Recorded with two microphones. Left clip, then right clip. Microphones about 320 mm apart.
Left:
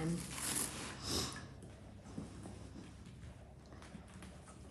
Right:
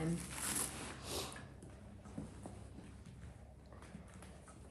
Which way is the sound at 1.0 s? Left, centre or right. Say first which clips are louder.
Left 5 dB; left.